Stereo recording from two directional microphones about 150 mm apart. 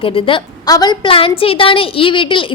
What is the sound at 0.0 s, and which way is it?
A woman's voice, 40° left (ahead or behind).